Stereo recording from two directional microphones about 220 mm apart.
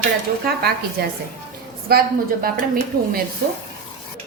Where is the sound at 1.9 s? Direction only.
45° right (ahead or behind).